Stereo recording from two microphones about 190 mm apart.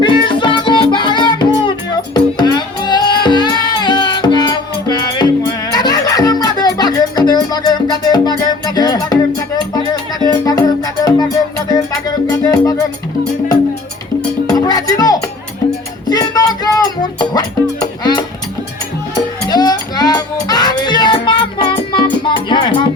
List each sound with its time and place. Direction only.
0.0 s music: 25° left (ahead or behind)
12.5 s speech: 20° left (ahead or behind)
14.4 s music: 20° left (ahead or behind)
19.5 s music: 20° left (ahead or behind)